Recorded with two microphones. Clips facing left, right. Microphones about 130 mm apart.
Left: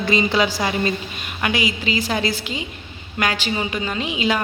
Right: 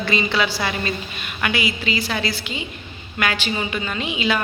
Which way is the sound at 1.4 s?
35° left (ahead or behind).